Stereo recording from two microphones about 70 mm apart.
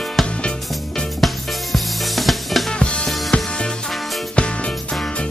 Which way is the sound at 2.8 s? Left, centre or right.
Centre.